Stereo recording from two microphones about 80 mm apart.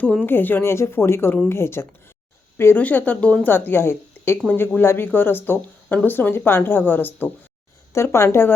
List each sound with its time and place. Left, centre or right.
0.3 s a woman's voice: left
2.7 s a woman's voice: centre
3.5 s a woman's voice: left
7.9 s speech: left